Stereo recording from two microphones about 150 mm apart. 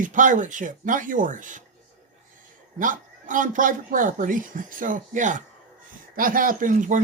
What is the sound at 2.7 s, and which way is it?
Speech, 60° right (ahead or behind).